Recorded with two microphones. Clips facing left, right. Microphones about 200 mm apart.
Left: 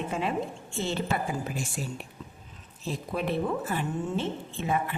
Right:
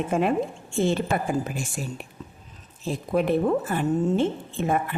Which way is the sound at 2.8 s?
50° right (ahead or behind).